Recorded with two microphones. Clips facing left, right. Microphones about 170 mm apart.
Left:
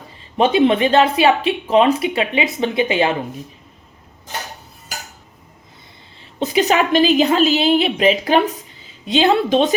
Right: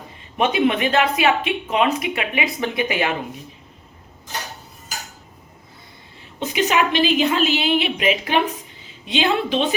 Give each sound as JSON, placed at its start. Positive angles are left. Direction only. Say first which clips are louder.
{"t": 0.3, "sound": "speech", "louder": "left 5 dB", "side_deg": 30}
{"t": 6.4, "sound": "a woman's voice", "louder": "left 3 dB", "side_deg": 35}